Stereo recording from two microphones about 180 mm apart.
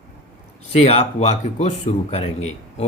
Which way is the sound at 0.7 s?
35° left (ahead or behind).